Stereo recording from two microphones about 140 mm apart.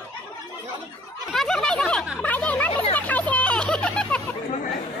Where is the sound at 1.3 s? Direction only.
5° left (ahead or behind).